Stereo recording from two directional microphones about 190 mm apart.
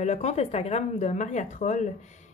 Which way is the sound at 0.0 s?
35° left (ahead or behind).